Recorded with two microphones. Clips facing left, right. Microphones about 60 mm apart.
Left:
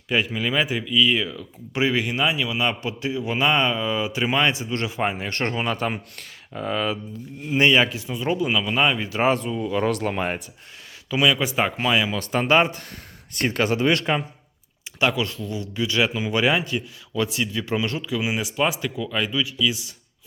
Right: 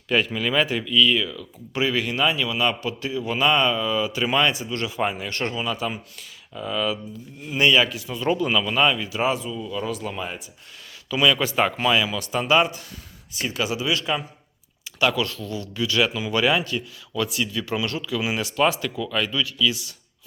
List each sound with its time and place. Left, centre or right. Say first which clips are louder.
0.1 s speech: right 1 dB; centre
8.3 s speech: right 1 dB; centre
9.0 s speech: left 3 dB; left
11.1 s speech: even; centre
12.0 s speech: left 1 dB; left
13.3 s speech: left 4 dB; left
14.9 s speech: even; left